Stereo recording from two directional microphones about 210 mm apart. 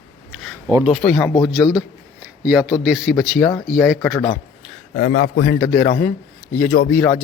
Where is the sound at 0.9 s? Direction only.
Centre (ahead or behind).